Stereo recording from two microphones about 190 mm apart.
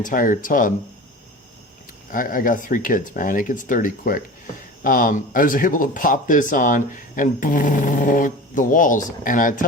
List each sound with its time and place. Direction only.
0.0 s speech: 45° left (ahead or behind)
2.1 s speech: 45° left (ahead or behind)